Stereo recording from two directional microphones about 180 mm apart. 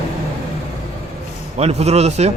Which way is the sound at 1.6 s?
35° right (ahead or behind).